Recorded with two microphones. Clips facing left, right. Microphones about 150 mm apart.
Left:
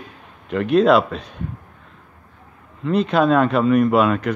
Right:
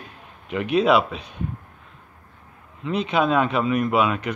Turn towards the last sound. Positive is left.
turn(degrees=0)  # may be behind; listen again after turning